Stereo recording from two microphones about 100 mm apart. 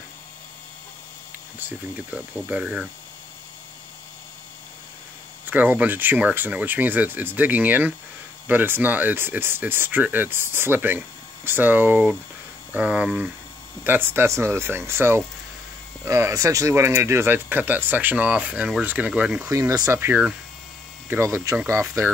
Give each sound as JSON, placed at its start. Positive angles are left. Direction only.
{"t": 1.6, "sound": "speech", "side_deg": -15}
{"t": 5.4, "sound": "speech", "side_deg": -15}
{"t": 13.8, "sound": "speech", "side_deg": -20}
{"t": 19.4, "sound": "speech", "side_deg": -30}
{"t": 19.9, "sound": "speech", "side_deg": -20}